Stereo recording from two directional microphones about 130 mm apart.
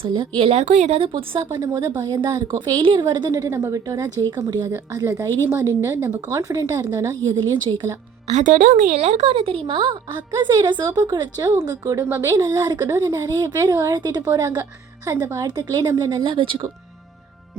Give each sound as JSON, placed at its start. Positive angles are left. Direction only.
{"t": 0.0, "sound": "a woman's voice", "side_deg": -45}
{"t": 1.5, "sound": "speech", "side_deg": -25}
{"t": 8.3, "sound": "speech", "side_deg": -70}